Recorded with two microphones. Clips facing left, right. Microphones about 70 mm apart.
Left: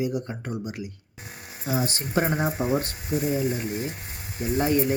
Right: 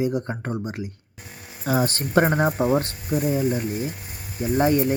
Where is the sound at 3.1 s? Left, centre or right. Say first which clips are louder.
Right 3 dB; right.